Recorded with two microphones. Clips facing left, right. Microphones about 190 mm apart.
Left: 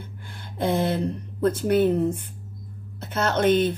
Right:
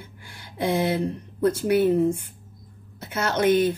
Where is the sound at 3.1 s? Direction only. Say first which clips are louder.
Left 1 dB; 55° left (ahead or behind).